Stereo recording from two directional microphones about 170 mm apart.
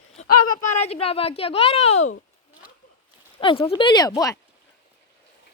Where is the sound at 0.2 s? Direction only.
40° left (ahead or behind).